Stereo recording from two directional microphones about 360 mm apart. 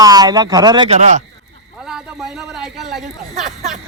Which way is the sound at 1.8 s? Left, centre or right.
Centre.